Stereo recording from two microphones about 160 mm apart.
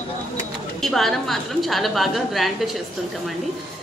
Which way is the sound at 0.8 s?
Centre (ahead or behind).